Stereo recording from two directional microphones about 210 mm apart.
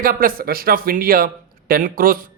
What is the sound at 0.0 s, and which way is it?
A man's voice, 45° right (ahead or behind).